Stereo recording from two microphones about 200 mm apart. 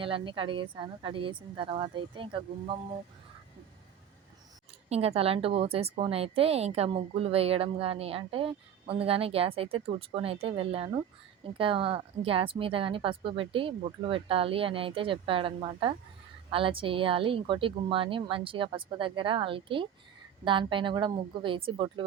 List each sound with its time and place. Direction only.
0.0 s a woman's voice: 25° right (ahead or behind)
4.9 s a woman's voice: 30° right (ahead or behind)